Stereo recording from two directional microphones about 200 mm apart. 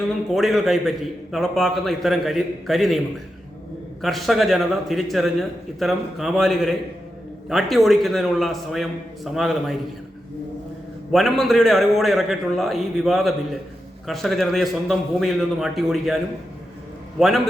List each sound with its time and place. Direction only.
0.3 s a man's voice: centre (ahead or behind)
4.0 s a man's voice: centre (ahead or behind)
11.1 s a man's voice: centre (ahead or behind)